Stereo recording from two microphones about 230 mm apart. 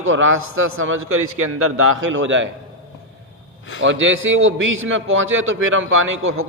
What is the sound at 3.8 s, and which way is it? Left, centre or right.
A man's voice, right.